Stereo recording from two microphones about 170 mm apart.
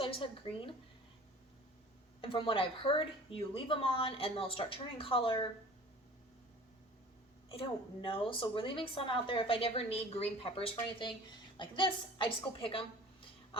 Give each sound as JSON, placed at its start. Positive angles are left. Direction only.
{"t": 0.0, "sound": "a woman's voice", "side_deg": 30}
{"t": 2.2, "sound": "a woman's voice", "side_deg": 30}
{"t": 7.5, "sound": "a woman's voice", "side_deg": 30}